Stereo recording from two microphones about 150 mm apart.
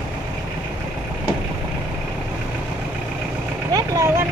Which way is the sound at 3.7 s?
20° right (ahead or behind).